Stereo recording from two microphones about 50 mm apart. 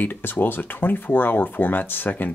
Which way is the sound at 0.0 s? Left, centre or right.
Left.